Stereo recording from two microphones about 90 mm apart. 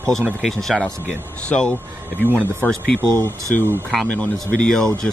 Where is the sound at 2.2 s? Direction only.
20° right (ahead or behind).